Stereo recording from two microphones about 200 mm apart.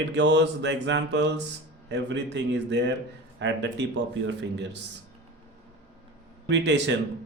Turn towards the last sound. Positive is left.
turn(degrees=-60)  # may be behind; listen again after turning